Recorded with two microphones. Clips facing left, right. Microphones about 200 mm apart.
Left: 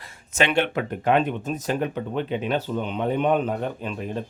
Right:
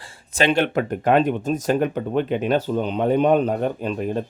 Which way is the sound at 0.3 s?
35° right (ahead or behind).